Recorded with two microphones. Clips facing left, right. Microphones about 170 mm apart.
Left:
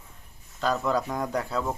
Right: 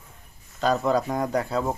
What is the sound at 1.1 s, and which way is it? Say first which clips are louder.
Speech: right 4 dB; 10° right (ahead or behind).